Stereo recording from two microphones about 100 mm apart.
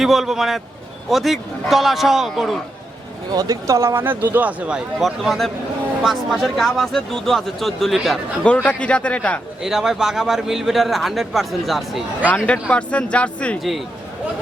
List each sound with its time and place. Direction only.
0.0 s a man's voice: 5° right (ahead or behind)
3.3 s speech: 40° right (ahead or behind); by 4.8 s 15° right (ahead or behind)
4.9 s a man's voice: 5° right (ahead or behind)
8.4 s a man's voice: 10° left (ahead or behind)
9.6 s a man's voice: 5° right (ahead or behind)
12.3 s a man's voice: 10° left (ahead or behind)